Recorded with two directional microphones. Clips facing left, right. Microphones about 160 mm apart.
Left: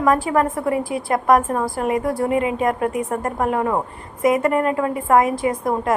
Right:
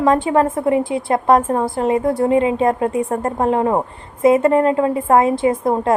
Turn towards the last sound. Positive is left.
turn(degrees=-25)  # may be behind; listen again after turning